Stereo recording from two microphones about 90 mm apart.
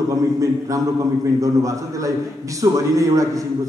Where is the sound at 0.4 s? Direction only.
35° right (ahead or behind).